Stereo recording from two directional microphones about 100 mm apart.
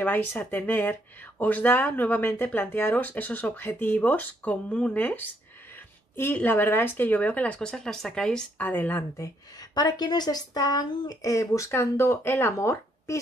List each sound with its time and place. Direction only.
0.0 s speech: 15° left (ahead or behind)
8.5 s speech: 20° left (ahead or behind)
9.1 s a woman's voice: 35° left (ahead or behind)